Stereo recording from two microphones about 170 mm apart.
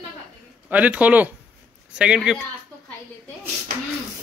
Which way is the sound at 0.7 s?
10° right (ahead or behind).